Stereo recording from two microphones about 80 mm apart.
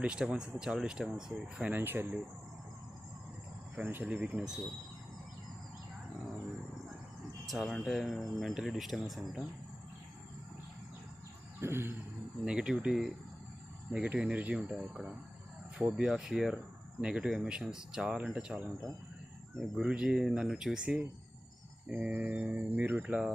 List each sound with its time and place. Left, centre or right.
0.0 s speech: centre
1.7 s speech: right
4.0 s speech: centre
7.4 s speech: centre
11.6 s a sound: right
12.5 s speech: centre
13.9 s speech: centre
23.0 s speech: centre